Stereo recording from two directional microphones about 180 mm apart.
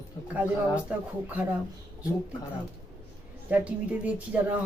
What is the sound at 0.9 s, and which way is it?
Speech, 10° right (ahead or behind).